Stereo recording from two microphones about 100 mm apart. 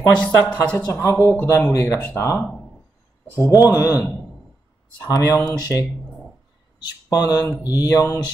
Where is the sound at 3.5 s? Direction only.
35° left (ahead or behind).